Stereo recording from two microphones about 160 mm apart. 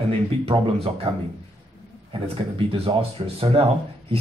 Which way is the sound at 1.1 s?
30° right (ahead or behind).